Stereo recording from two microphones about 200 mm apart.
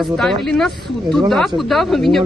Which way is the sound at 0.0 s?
Centre (ahead or behind).